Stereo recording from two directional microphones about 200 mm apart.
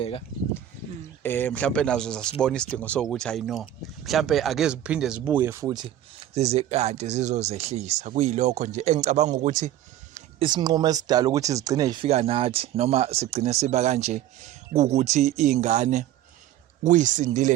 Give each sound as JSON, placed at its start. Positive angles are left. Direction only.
{"t": 1.2, "sound": "speech", "side_deg": 10}
{"t": 6.3, "sound": "speech", "side_deg": -30}
{"t": 10.4, "sound": "speech", "side_deg": -20}
{"t": 12.0, "sound": "speech", "side_deg": -30}